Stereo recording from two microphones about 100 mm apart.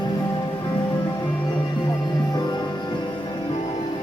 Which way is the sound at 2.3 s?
40° left (ahead or behind).